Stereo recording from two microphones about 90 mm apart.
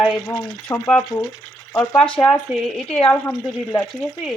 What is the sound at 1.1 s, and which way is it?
Speech, 25° left (ahead or behind).